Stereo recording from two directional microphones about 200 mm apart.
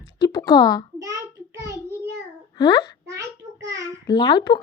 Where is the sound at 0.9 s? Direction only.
15° right (ahead or behind).